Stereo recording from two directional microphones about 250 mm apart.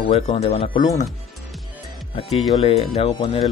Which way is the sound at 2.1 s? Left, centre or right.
Left.